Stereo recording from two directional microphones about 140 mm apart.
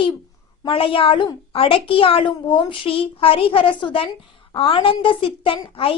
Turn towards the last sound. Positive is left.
turn(degrees=40)  # may be behind; listen again after turning